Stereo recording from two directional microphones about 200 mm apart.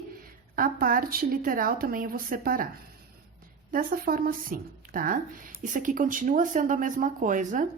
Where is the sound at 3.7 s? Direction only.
45° right (ahead or behind).